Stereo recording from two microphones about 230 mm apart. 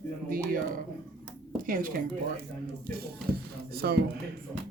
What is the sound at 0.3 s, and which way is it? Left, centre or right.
Speech, right.